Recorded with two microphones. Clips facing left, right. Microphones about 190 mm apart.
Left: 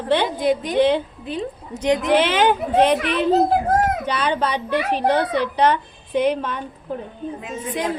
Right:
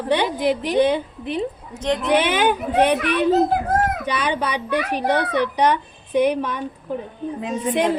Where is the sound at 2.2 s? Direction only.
15° right (ahead or behind).